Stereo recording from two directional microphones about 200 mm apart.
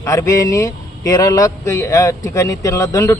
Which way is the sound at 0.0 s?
15° left (ahead or behind).